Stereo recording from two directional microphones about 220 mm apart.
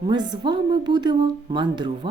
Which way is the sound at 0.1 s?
20° right (ahead or behind).